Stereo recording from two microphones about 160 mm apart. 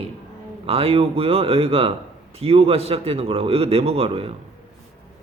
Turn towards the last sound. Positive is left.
turn(degrees=-35)  # may be behind; listen again after turning